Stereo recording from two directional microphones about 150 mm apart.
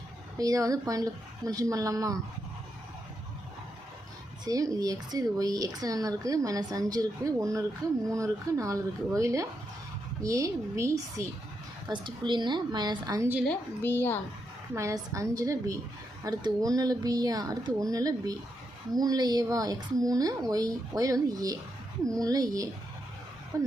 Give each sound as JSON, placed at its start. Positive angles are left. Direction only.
{"t": 0.3, "sound": "speech", "side_deg": -25}
{"t": 4.4, "sound": "speech", "side_deg": -25}
{"t": 11.9, "sound": "a woman's voice", "side_deg": -30}
{"t": 13.5, "sound": "a woman's voice", "side_deg": 15}
{"t": 14.8, "sound": "speech", "side_deg": -20}